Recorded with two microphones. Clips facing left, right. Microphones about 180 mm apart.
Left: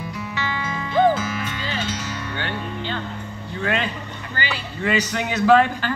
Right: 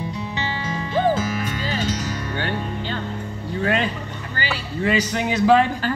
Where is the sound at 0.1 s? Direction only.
25° right (ahead or behind); by 3.0 s 45° right (ahead or behind).